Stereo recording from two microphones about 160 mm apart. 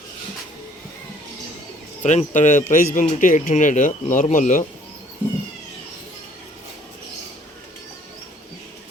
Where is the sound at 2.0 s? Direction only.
45° left (ahead or behind).